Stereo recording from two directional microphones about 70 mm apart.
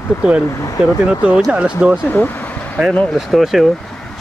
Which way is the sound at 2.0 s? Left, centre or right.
Left.